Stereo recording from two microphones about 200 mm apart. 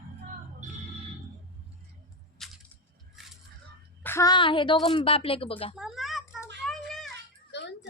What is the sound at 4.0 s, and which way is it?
A woman's voice, 15° left (ahead or behind).